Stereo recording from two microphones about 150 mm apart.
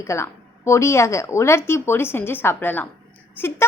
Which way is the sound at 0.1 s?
20° left (ahead or behind).